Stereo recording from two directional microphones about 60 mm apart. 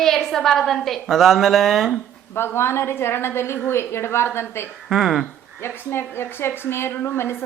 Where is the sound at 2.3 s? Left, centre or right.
Left.